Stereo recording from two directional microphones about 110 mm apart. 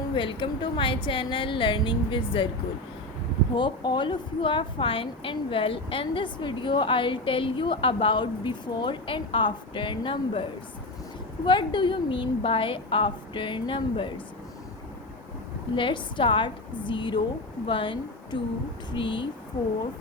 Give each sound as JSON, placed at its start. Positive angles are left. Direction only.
{"t": 0.1, "sound": "a woman's voice", "side_deg": 50}
{"t": 3.5, "sound": "a woman's voice", "side_deg": 45}
{"t": 11.4, "sound": "a woman's voice", "side_deg": 45}
{"t": 15.7, "sound": "a woman's voice", "side_deg": 45}